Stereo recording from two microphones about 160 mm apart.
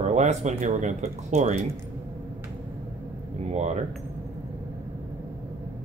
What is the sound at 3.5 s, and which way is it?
Speech, 45° right (ahead or behind).